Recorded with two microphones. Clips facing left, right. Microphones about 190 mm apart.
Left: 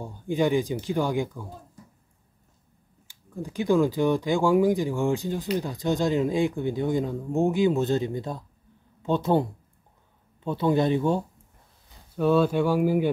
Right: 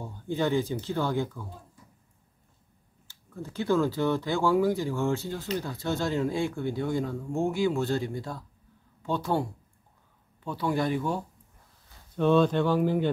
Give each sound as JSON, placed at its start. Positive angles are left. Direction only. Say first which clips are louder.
{"t": 0.0, "sound": "speech", "louder": "left 4 dB", "side_deg": 15}
{"t": 3.1, "sound": "speech", "louder": "left 4 dB", "side_deg": 15}
{"t": 12.2, "sound": "speech", "louder": "left 1 dB", "side_deg": 5}